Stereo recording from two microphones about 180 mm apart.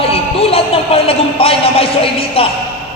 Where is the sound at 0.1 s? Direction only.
35° left (ahead or behind).